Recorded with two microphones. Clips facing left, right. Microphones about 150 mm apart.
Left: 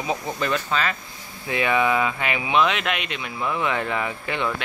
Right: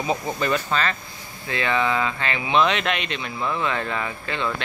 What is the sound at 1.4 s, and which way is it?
Speech, 15° left (ahead or behind).